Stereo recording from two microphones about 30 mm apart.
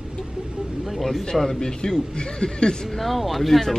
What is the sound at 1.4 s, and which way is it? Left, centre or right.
A man's voice, centre.